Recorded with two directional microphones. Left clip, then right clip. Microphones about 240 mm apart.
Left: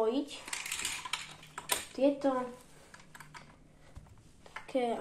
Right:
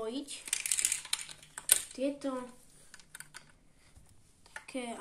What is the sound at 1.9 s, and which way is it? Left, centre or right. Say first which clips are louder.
Speech: left 6 dB; right.